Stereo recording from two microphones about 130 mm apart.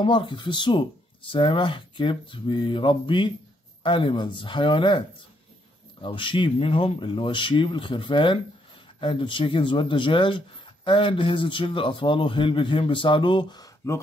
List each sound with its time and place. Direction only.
0.0 s speech: 40° left (ahead or behind)